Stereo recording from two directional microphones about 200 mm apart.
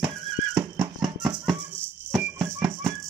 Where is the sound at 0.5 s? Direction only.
Centre (ahead or behind).